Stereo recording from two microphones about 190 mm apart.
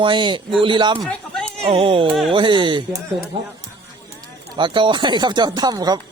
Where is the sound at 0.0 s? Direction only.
25° right (ahead or behind).